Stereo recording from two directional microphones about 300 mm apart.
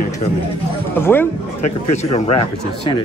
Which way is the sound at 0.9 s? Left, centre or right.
Centre.